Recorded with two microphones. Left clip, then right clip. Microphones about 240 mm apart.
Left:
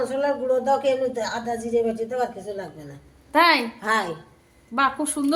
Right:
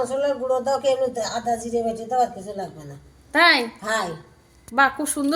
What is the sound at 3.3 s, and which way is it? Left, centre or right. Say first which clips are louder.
Speech: right 1 dB; centre.